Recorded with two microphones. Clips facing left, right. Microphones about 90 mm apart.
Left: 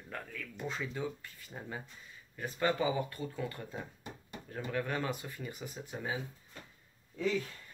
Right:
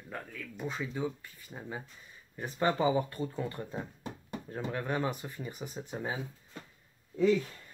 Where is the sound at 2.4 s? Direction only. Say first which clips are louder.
Right 3 dB; 25° right (ahead or behind).